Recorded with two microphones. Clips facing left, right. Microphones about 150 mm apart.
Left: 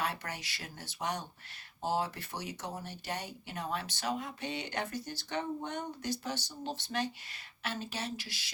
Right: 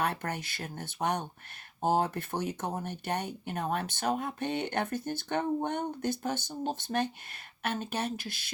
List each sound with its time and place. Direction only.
0.0 s speech: 55° right (ahead or behind)